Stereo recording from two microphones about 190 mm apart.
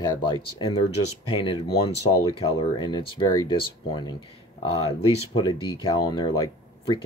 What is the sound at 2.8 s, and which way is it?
Speech, 25° left (ahead or behind).